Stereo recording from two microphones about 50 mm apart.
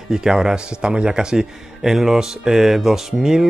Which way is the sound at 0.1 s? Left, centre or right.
Centre.